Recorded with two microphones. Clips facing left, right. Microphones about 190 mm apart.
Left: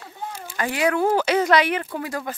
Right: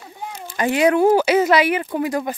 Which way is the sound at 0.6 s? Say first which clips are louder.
Right 6 dB; 20° right (ahead or behind).